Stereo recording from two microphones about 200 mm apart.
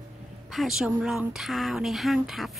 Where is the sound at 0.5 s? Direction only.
Centre (ahead or behind).